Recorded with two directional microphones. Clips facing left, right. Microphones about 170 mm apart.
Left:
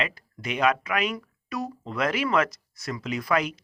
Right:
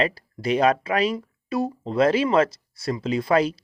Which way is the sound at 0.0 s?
35° right (ahead or behind).